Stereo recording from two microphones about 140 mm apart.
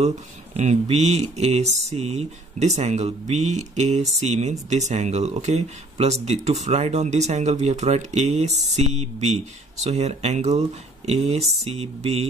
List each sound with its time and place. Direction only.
0.6 s speech: 55° right (ahead or behind)